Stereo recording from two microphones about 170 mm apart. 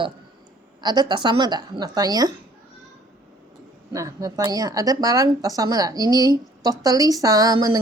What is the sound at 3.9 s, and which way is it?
Speech, 20° right (ahead or behind).